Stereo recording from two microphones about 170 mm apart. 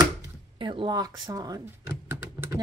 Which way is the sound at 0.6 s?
30° right (ahead or behind).